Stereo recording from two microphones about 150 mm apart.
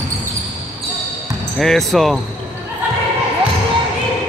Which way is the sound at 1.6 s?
Centre (ahead or behind).